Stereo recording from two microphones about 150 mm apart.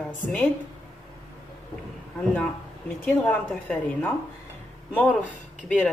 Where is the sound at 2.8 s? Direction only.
10° left (ahead or behind).